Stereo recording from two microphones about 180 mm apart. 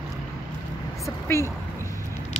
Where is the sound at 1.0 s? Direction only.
15° left (ahead or behind).